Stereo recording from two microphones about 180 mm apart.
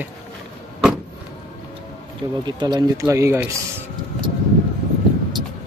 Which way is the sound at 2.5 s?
25° right (ahead or behind).